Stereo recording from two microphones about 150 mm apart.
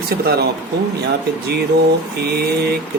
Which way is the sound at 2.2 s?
90° right.